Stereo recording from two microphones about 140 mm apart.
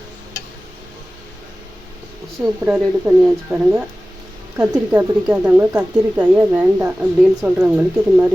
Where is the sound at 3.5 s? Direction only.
20° right (ahead or behind).